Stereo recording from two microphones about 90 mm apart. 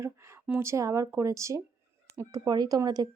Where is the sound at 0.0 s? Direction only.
30° right (ahead or behind).